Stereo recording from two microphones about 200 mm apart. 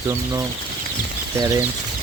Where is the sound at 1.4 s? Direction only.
20° right (ahead or behind).